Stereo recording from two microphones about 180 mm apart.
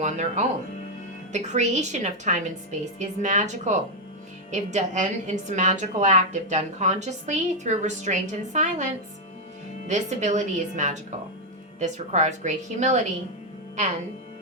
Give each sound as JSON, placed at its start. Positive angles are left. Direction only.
{"t": 0.0, "sound": "a woman's voice", "side_deg": -40}